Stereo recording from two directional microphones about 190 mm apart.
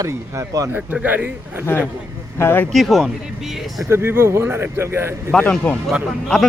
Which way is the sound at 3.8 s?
15° right (ahead or behind).